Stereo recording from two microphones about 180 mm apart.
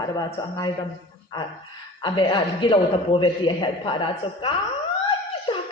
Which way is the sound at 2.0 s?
25° left (ahead or behind).